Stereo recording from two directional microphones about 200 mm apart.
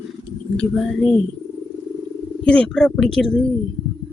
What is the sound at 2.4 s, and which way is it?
Speech, 5° left (ahead or behind).